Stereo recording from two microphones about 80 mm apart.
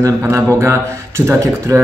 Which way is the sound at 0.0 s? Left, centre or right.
Right.